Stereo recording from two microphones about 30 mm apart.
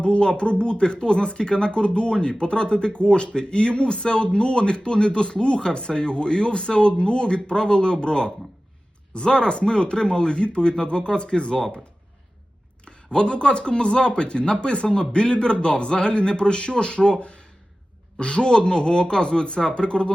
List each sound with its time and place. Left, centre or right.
0.0 s speech: left
12.8 s speech: left